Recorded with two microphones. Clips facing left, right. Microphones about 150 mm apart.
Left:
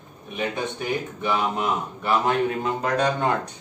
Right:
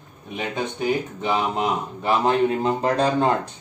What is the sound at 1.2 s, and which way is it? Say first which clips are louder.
Speech: right 2 dB; 25° right (ahead or behind).